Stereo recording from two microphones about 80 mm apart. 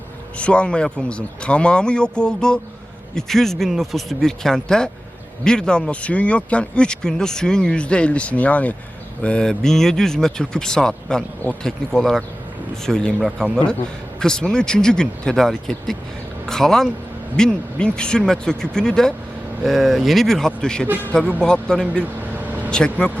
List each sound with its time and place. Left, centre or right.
0.3 s speech: centre
20.8 s a man's voice: right
21.1 s speech: centre